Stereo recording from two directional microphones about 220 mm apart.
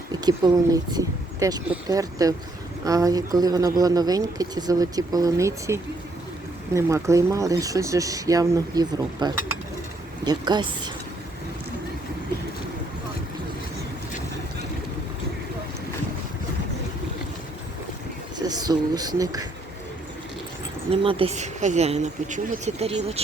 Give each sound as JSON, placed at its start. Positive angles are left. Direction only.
{"t": 0.1, "sound": "speech", "side_deg": -20}
{"t": 18.3, "sound": "speech", "side_deg": -20}
{"t": 20.9, "sound": "speech", "side_deg": -25}